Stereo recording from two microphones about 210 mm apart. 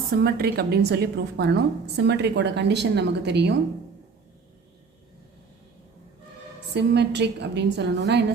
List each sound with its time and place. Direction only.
0.2 s a woman's voice: 45° right (ahead or behind)
6.7 s a woman's voice: 55° right (ahead or behind)